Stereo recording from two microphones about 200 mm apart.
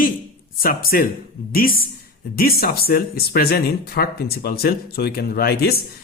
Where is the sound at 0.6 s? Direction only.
45° left (ahead or behind).